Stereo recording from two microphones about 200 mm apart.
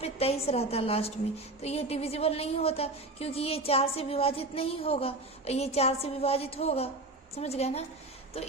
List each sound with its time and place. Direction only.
0.0 s a woman's voice: 30° left (ahead or behind)